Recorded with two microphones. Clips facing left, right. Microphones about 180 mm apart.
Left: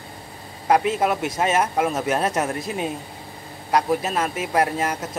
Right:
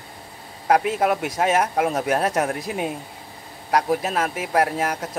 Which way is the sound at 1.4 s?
10° right (ahead or behind).